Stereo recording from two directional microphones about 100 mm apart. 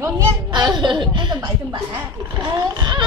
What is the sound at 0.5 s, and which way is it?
Speech, 50° right (ahead or behind).